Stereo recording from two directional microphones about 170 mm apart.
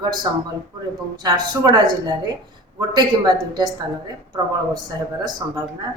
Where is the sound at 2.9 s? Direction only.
25° right (ahead or behind).